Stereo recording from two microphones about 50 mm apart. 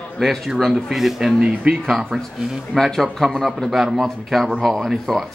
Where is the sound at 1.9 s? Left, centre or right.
Centre.